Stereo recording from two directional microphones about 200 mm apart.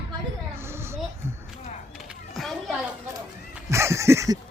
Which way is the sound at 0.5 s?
10° right (ahead or behind).